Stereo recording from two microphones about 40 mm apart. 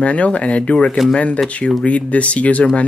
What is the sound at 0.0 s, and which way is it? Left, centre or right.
Speech, left.